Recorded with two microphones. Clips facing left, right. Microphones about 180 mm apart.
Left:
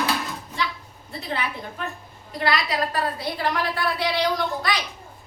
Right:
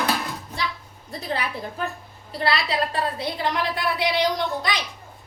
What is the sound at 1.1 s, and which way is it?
Speech, 40° right (ahead or behind).